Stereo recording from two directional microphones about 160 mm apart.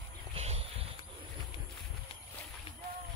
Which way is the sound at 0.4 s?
40° right (ahead or behind).